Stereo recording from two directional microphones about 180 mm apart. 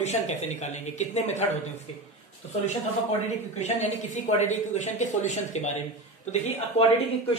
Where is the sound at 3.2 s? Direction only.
40° left (ahead or behind).